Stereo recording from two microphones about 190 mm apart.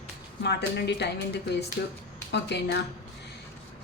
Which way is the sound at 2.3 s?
65° left (ahead or behind).